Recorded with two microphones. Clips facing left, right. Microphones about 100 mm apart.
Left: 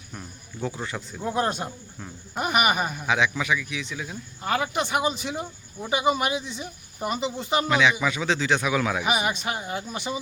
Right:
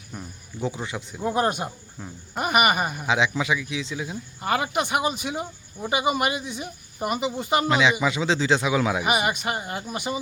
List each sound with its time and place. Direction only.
0.6 s a man's voice: 20° right (ahead or behind)
1.2 s speech: 5° right (ahead or behind)
3.1 s a man's voice: 25° right (ahead or behind)
4.4 s speech: 5° right (ahead or behind)
7.7 s a man's voice: 25° right (ahead or behind)
9.0 s speech: 5° right (ahead or behind)